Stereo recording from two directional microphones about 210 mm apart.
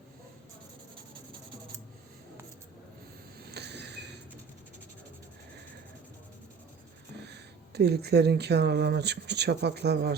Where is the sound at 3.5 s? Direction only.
55° right (ahead or behind).